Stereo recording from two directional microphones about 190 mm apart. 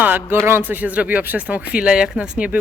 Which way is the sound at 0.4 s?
10° right (ahead or behind).